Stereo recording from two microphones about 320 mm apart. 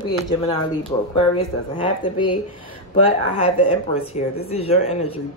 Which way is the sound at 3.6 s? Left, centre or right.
Centre.